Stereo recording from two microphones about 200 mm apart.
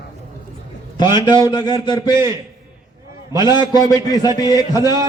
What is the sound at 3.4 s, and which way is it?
A man's voice, 20° left (ahead or behind).